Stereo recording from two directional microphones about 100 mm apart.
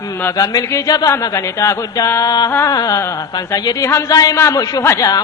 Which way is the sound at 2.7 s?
40° left (ahead or behind).